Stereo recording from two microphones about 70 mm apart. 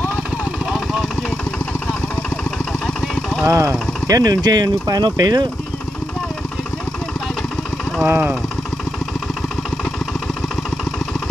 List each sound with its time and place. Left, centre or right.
3.4 s speech: right
4.2 s speech: right
8.1 s speech: right